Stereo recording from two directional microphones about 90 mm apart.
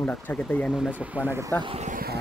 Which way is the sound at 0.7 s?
10° right (ahead or behind).